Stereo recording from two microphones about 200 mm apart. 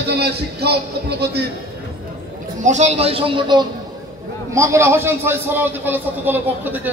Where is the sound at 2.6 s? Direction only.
35° right (ahead or behind).